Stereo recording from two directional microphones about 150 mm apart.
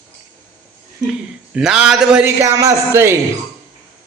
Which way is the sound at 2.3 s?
20° right (ahead or behind).